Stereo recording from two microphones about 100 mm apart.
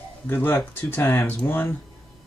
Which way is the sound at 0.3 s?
20° left (ahead or behind).